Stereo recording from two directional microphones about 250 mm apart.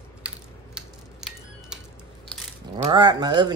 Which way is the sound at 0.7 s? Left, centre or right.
Centre.